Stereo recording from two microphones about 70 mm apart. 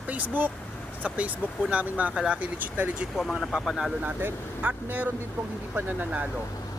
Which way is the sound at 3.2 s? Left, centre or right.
Centre.